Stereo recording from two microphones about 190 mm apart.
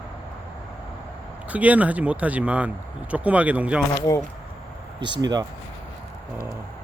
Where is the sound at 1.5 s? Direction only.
10° right (ahead or behind).